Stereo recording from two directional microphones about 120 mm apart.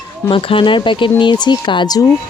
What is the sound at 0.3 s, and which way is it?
Speech, 50° left (ahead or behind).